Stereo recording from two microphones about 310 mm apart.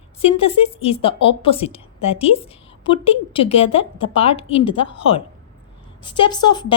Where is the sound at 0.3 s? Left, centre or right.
Centre.